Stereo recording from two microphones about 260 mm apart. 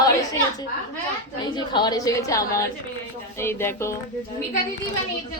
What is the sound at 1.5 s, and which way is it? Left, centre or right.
A woman's voice, centre.